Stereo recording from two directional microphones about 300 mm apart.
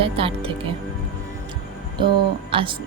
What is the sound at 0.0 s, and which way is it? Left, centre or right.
Speech, centre.